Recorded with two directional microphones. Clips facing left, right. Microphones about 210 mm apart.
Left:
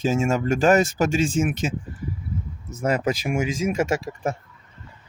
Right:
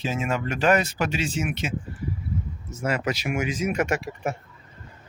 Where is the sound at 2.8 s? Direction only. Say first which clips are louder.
Left 4 dB; 35° left (ahead or behind).